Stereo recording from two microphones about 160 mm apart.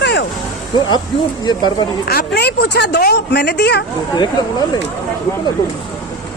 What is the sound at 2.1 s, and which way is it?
Speech, 85° left.